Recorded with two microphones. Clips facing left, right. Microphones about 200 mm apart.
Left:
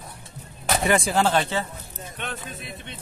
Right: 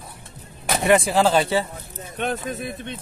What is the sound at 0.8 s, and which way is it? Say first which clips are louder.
Speech: right 5 dB; centre (ahead or behind).